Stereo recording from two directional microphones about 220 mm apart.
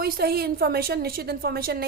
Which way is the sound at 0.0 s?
45° right (ahead or behind).